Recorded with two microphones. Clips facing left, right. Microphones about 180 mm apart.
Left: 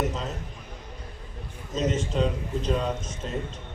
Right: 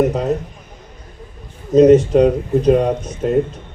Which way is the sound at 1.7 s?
65° right (ahead or behind).